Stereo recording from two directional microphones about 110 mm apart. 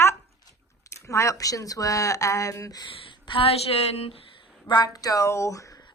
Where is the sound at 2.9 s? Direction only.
55° left (ahead or behind).